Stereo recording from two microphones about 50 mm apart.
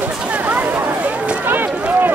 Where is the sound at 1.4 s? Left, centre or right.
Right.